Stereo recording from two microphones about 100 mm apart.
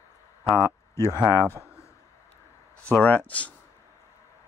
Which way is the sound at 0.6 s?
30° left (ahead or behind).